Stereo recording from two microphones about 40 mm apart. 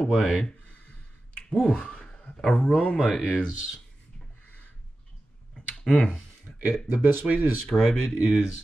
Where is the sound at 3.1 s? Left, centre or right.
Left.